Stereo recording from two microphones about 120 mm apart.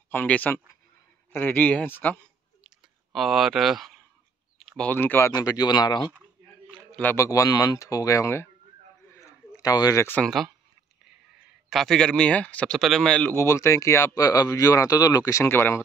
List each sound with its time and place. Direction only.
0.1 s speech: 15° left (ahead or behind)
2.6 s clicking: centre (ahead or behind)
4.6 s a sound: 5° left (ahead or behind)
4.9 s speech: 20° left (ahead or behind)
5.3 s speech: 35° left (ahead or behind)
7.2 s speech: 30° left (ahead or behind)
9.1 s a sound: 30° left (ahead or behind)
10.0 s speech: 10° left (ahead or behind)
11.7 s speech: 5° left (ahead or behind)
13.3 s speech: 25° left (ahead or behind)